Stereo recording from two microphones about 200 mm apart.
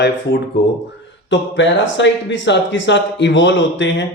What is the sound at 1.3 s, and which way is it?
Speech, 65° left (ahead or behind).